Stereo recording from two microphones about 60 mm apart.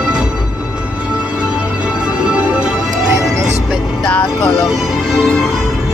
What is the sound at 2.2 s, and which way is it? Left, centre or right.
Music, centre.